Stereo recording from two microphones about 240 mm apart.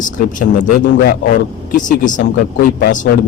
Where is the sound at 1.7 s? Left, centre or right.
Left.